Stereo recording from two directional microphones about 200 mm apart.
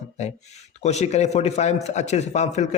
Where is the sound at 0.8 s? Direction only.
35° left (ahead or behind).